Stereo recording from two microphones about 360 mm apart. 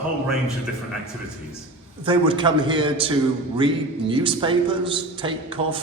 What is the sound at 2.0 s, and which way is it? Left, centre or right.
A man's voice, centre.